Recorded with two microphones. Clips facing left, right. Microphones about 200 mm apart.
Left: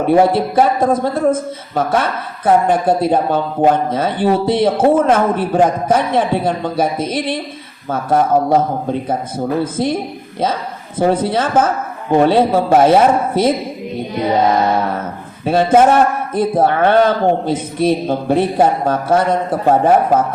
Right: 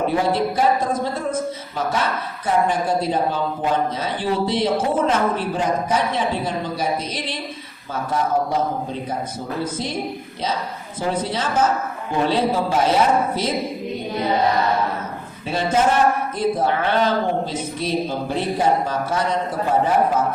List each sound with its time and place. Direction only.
0.1 s a man's voice: 55° left (ahead or behind)
11.0 s a woman's voice: 55° left (ahead or behind)
15.4 s a man's voice: 55° left (ahead or behind)